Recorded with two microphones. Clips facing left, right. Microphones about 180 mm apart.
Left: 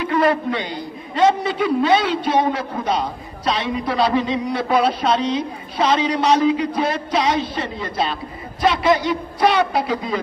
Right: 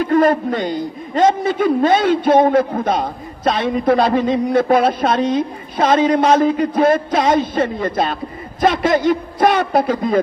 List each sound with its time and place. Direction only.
0.0 s a man's voice: 45° right (ahead or behind)